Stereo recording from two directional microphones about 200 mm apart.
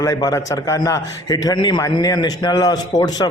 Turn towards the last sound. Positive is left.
turn(degrees=20)  # may be behind; listen again after turning